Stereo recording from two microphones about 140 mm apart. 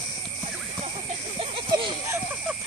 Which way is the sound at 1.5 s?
35° right (ahead or behind).